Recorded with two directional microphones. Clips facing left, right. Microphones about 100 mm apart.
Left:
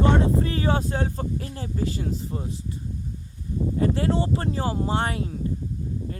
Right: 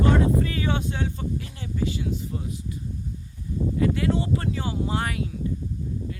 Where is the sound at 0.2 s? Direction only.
30° left (ahead or behind).